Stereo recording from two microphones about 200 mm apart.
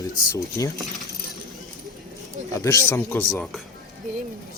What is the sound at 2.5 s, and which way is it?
A man's voice, 15° left (ahead or behind).